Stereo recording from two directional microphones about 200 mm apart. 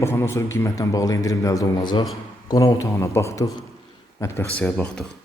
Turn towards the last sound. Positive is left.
turn(degrees=5)  # may be behind; listen again after turning